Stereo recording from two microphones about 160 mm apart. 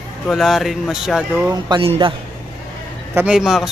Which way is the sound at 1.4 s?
25° right (ahead or behind).